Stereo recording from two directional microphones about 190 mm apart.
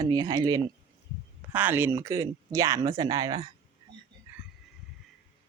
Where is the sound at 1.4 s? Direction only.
10° right (ahead or behind).